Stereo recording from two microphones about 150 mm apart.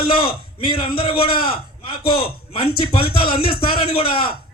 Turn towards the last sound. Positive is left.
turn(degrees=35)  # may be behind; listen again after turning